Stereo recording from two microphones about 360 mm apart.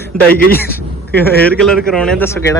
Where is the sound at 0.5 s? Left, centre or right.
Left.